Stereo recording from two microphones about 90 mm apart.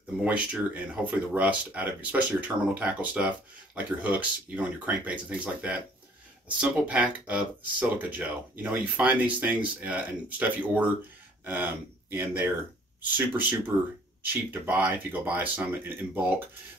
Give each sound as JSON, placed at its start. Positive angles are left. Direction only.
{"t": 0.2, "sound": "speech", "side_deg": -15}